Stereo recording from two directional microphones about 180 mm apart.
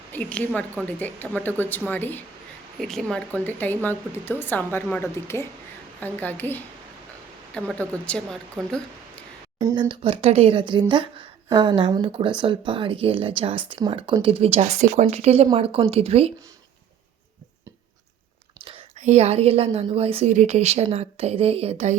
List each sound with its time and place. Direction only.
0.1 s a woman's voice: 10° left (ahead or behind)
9.6 s speech: 15° right (ahead or behind)
9.9 s a woman's voice: 30° right (ahead or behind)
18.6 s a woman's voice: 30° right (ahead or behind)